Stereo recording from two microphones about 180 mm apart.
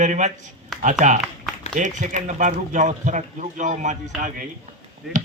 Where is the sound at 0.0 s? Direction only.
40° right (ahead or behind).